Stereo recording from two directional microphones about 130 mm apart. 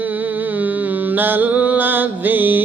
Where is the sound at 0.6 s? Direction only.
15° right (ahead or behind).